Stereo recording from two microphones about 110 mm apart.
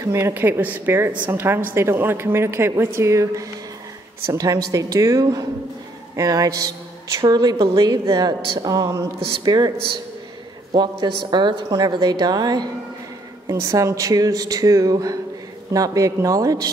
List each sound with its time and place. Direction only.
0.0 s a woman's voice: 25° right (ahead or behind)
9.4 s a woman's voice: 40° right (ahead or behind)
10.7 s a woman's voice: 40° right (ahead or behind)